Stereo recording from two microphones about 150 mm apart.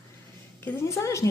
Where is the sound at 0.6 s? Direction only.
15° left (ahead or behind).